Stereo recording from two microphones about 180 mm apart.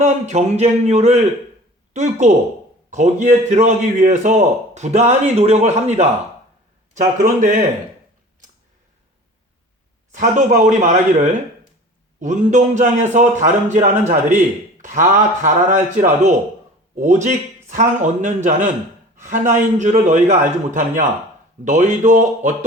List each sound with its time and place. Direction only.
0.0 s a man's voice: 40° right (ahead or behind)
3.5 s a man's voice: 40° right (ahead or behind)
10.1 s a man's voice: 45° right (ahead or behind)